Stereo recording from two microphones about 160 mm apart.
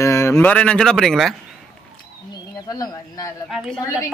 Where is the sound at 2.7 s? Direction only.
25° left (ahead or behind).